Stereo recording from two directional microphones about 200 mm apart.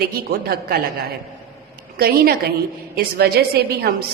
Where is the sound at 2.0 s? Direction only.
50° right (ahead or behind).